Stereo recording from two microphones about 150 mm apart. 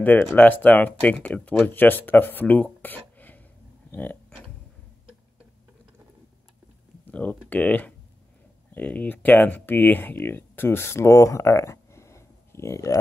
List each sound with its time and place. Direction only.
0.0 s speech: 10° left (ahead or behind)
7.1 s speech: 10° left (ahead or behind)